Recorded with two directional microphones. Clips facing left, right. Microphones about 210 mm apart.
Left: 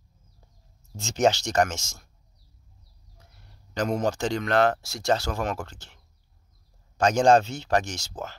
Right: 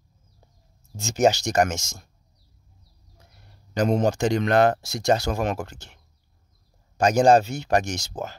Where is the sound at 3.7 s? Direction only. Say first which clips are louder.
Right 4 dB; 20° right (ahead or behind).